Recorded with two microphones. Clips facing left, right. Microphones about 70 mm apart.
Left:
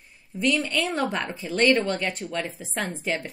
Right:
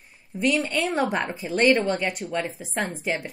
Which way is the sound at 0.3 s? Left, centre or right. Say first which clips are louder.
Right 1 dB; centre.